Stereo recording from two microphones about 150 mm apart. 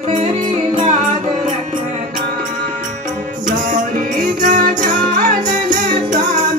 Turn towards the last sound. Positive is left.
turn(degrees=-55)  # may be behind; listen again after turning